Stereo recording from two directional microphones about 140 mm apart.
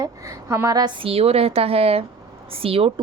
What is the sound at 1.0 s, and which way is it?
A woman's voice, 45° right (ahead or behind).